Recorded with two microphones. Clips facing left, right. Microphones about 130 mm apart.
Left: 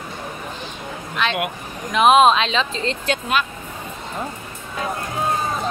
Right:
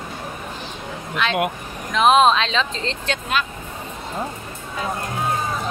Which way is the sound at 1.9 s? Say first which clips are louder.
Left 1 dB; 5° left (ahead or behind).